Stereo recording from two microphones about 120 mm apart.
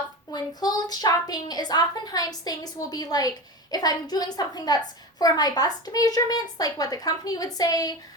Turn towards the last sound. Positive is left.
turn(degrees=30)  # may be behind; listen again after turning